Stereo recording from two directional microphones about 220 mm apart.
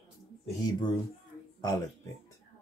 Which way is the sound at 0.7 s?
20° left (ahead or behind).